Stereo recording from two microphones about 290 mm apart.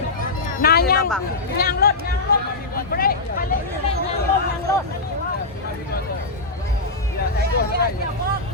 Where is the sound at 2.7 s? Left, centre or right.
Left.